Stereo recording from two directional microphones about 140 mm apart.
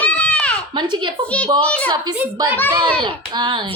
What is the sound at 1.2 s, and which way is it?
Speech, 10° left (ahead or behind).